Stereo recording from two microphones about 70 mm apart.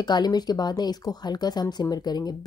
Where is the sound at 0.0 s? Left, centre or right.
Left.